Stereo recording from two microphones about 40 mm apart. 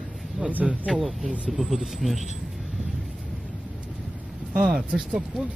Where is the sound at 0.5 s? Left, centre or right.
Right.